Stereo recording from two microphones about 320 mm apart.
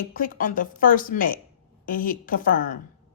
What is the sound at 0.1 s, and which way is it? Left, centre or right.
A woman's voice, left.